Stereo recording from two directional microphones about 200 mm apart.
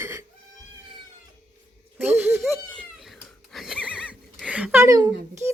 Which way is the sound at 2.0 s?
10° right (ahead or behind).